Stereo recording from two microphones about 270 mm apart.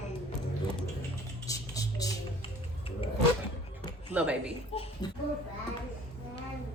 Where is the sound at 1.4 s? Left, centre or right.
Centre.